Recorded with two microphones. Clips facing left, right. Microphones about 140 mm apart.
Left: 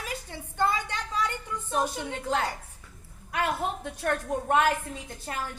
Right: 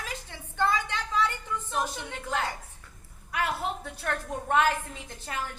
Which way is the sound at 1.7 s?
45° left (ahead or behind).